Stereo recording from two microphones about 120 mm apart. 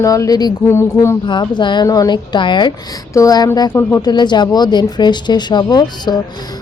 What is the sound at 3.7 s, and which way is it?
Speech, 20° left (ahead or behind).